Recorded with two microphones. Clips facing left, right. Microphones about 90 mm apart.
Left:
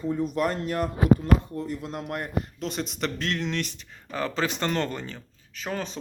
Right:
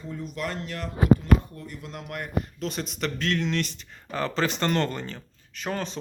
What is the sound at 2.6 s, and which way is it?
Speech, 20° left (ahead or behind).